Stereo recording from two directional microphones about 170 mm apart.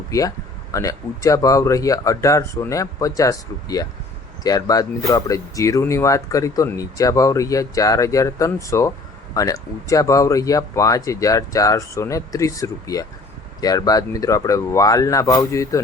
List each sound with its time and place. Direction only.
0.1 s speech: 20° left (ahead or behind)